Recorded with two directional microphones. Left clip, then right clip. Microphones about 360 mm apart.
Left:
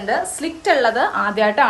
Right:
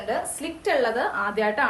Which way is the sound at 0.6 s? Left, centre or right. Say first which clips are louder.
Left 7 dB; left.